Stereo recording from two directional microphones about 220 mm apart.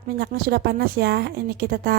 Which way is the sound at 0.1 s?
45° right (ahead or behind).